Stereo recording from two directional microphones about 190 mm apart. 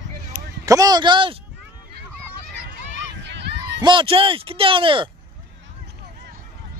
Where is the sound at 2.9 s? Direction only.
70° right (ahead or behind).